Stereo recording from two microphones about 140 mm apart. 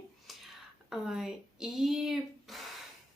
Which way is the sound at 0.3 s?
Centre (ahead or behind).